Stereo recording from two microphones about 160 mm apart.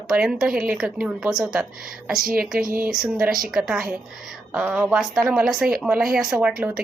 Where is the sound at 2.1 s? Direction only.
65° right (ahead or behind).